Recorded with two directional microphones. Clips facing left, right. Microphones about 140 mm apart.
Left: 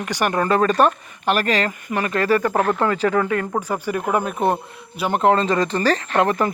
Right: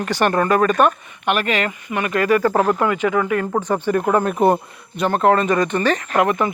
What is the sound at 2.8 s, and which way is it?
Speech, 35° left (ahead or behind).